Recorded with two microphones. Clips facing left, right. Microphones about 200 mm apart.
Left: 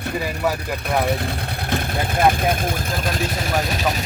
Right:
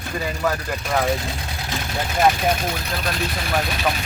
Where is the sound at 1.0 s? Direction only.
60° left (ahead or behind).